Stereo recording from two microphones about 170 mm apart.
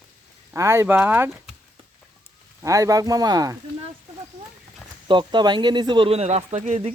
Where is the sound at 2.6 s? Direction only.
20° right (ahead or behind).